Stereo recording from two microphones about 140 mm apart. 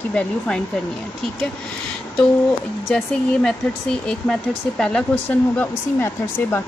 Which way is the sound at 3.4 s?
5° left (ahead or behind).